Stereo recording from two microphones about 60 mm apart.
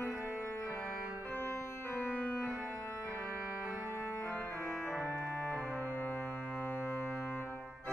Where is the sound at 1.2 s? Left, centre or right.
Left.